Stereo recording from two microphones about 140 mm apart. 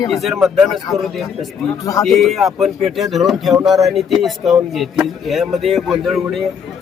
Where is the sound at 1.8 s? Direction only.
25° left (ahead or behind).